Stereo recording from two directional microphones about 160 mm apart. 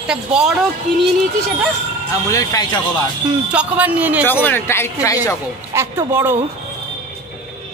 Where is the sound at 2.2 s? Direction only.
20° left (ahead or behind).